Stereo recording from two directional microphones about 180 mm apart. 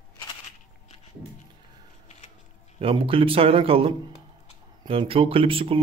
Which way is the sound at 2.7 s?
30° right (ahead or behind).